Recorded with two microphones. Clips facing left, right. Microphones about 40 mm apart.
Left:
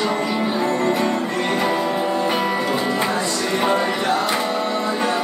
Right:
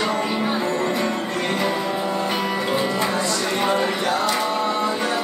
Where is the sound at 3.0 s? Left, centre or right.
Centre.